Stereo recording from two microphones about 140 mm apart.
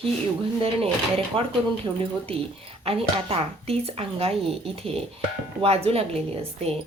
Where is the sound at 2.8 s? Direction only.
45° right (ahead or behind).